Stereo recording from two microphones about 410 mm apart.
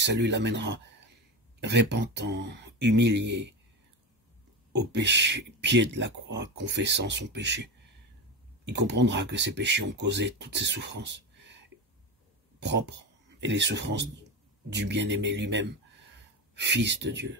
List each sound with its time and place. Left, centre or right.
0.0 s speech: right
4.7 s speech: right
12.5 s speech: right